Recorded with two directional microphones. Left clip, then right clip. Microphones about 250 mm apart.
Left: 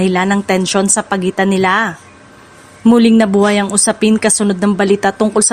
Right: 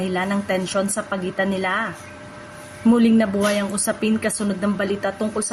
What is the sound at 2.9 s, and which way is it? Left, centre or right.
A woman's voice, left.